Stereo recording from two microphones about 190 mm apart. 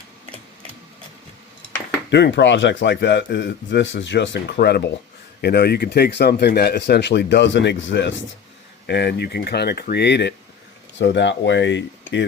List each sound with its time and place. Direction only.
2.0 s speech: 65° left (ahead or behind)